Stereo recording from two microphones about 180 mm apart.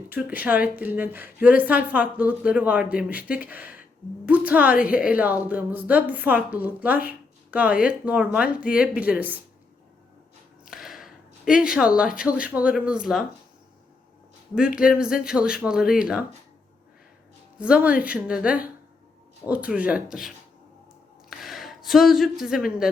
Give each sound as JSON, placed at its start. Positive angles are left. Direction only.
{"t": 0.1, "sound": "a woman's voice", "side_deg": -10}
{"t": 10.7, "sound": "a sound", "side_deg": 0}
{"t": 11.9, "sound": "speech", "side_deg": -5}
{"t": 14.8, "sound": "speech", "side_deg": -5}
{"t": 17.6, "sound": "a woman's voice", "side_deg": -5}